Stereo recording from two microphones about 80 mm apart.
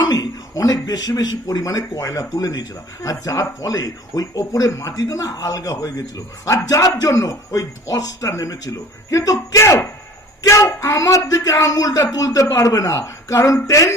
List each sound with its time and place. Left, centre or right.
0.1 s a man's voice: left